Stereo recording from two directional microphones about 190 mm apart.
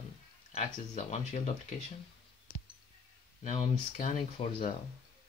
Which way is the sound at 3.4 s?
40° left (ahead or behind).